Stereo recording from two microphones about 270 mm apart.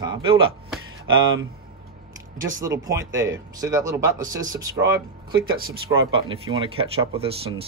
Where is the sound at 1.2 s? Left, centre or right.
Right.